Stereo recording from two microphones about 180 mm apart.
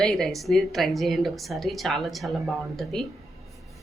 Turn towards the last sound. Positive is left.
turn(degrees=0)  # may be behind; listen again after turning